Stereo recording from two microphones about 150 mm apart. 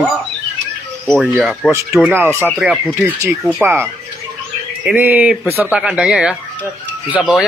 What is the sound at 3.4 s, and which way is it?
Speech, centre (ahead or behind).